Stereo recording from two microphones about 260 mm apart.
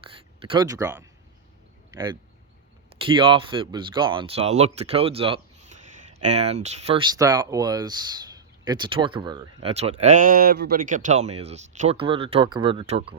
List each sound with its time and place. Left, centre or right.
0.4 s speech: centre